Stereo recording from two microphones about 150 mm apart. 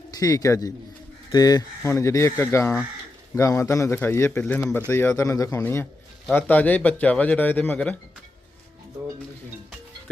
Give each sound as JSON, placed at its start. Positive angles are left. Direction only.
{"t": 0.1, "sound": "a man's voice", "side_deg": 25}